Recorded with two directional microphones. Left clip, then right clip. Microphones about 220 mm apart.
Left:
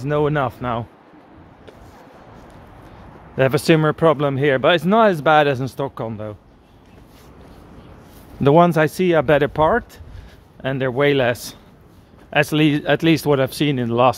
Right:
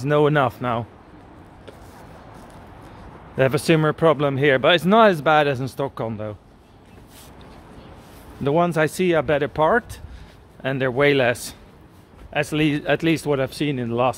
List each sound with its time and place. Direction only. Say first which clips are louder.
0.0 s speech: right 2 dB; 10° right (ahead or behind)
3.3 s speech: left 2 dB; 10° left (ahead or behind)
8.4 s speech: left 6 dB; 25° left (ahead or behind)
12.3 s speech: left 5 dB; 20° left (ahead or behind)